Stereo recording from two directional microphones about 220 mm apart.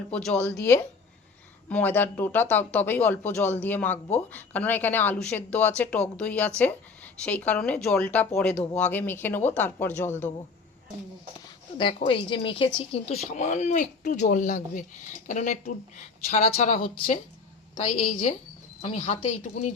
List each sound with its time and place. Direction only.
0.1 s speech: 5° left (ahead or behind)
1.7 s a woman's voice: 10° left (ahead or behind)
11.8 s a woman's voice: 25° left (ahead or behind)